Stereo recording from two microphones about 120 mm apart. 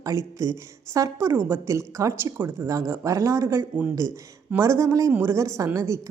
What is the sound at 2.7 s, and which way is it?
A woman's voice, 25° right (ahead or behind).